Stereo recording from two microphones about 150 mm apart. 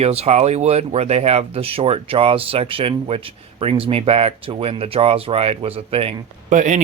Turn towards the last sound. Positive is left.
turn(degrees=-60)  # may be behind; listen again after turning